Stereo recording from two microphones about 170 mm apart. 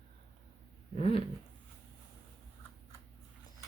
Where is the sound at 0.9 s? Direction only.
35° left (ahead or behind).